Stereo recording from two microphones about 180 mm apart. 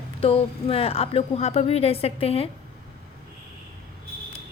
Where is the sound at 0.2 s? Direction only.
30° left (ahead or behind).